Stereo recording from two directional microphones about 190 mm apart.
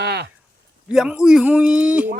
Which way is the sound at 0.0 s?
60° right (ahead or behind).